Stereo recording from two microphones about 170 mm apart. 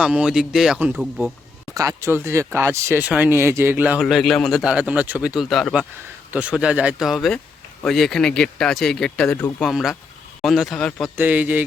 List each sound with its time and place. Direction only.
0.0 s speech: 5° right (ahead or behind)
4.0 s speech: centre (ahead or behind)
11.2 s speech: 10° right (ahead or behind)